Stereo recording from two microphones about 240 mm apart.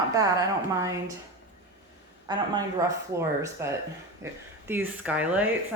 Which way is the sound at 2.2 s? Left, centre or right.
Centre.